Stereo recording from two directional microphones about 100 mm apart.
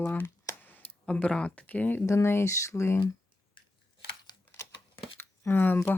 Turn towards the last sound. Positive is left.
turn(degrees=20)  # may be behind; listen again after turning